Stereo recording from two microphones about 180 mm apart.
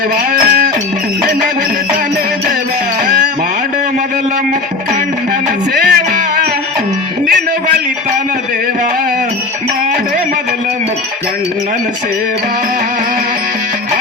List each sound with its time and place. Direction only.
0.3 s music: 50° right (ahead or behind)
5.7 s music: 60° right (ahead or behind)